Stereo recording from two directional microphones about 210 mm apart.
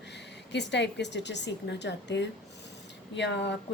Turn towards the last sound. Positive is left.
turn(degrees=55)  # may be behind; listen again after turning